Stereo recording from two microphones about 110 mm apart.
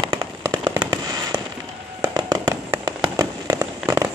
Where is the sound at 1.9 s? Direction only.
35° right (ahead or behind).